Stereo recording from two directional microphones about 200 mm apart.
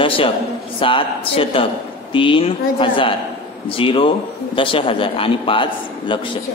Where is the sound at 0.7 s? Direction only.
25° left (ahead or behind).